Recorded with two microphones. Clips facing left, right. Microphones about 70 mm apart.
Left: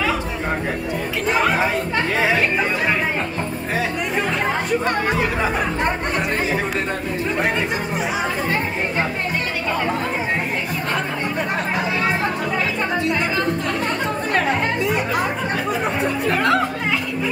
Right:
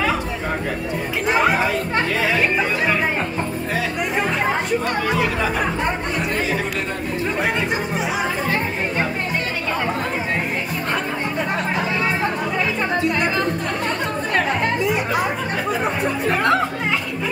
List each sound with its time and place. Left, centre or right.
1.2 s speech: centre
4.8 s speech: left
15.7 s speech: centre